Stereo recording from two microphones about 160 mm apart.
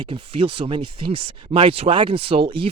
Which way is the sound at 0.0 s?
35° right (ahead or behind).